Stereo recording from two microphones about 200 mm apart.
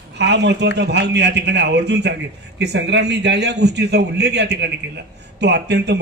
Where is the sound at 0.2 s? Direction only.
60° right (ahead or behind).